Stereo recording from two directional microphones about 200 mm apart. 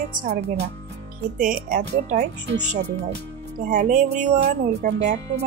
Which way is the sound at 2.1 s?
35° right (ahead or behind).